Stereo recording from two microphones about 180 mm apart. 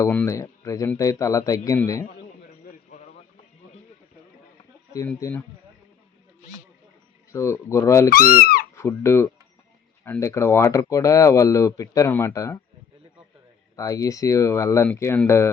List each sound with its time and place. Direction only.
0.0 s speech: 15° left (ahead or behind)
2.6 s a sound: 45° left (ahead or behind)
5.0 s speech: 10° left (ahead or behind)
7.3 s speech: 15° left (ahead or behind)
8.1 s speech: 55° left (ahead or behind)
8.7 s speech: 15° left (ahead or behind)
13.7 s speech: 20° left (ahead or behind)